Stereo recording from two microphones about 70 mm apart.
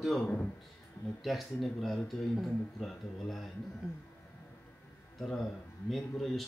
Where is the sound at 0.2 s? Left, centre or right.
Left.